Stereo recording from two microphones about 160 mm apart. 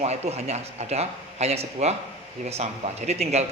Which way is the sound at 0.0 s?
40° right (ahead or behind).